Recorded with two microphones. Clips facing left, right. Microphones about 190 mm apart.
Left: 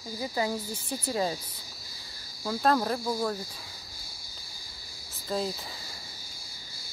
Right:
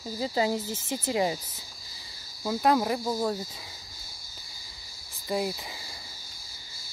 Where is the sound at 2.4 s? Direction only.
10° right (ahead or behind).